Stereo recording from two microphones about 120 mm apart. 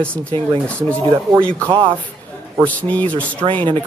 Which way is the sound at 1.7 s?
45° right (ahead or behind).